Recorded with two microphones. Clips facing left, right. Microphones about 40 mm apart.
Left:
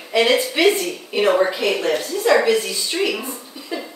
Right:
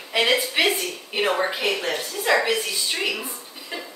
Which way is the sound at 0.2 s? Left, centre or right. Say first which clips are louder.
Left 4 dB; centre.